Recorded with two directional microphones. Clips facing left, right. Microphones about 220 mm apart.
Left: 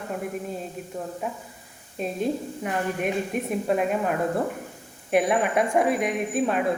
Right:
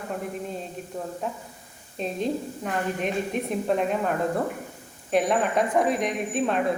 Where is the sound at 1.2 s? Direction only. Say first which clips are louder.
Even; 10° left (ahead or behind).